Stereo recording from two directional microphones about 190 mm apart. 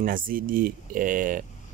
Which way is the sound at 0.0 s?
45° right (ahead or behind).